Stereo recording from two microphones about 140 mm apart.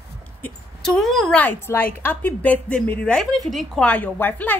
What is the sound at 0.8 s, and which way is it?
A woman's voice, centre (ahead or behind).